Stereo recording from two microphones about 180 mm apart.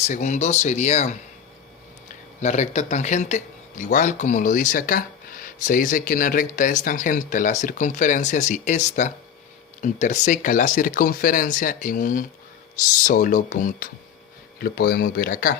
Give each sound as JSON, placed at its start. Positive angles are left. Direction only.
{"t": 0.1, "sound": "speech", "side_deg": 40}